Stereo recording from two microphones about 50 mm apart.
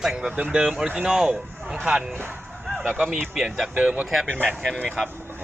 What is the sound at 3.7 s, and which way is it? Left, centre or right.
Speech, right.